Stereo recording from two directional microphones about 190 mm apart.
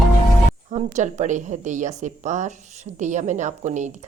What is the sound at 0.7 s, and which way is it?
A woman's voice, 40° right (ahead or behind).